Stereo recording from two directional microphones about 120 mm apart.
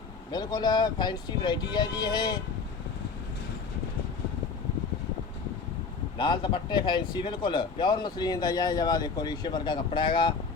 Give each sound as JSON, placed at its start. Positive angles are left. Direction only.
{"t": 0.3, "sound": "speech", "side_deg": 35}
{"t": 6.1, "sound": "speech", "side_deg": 40}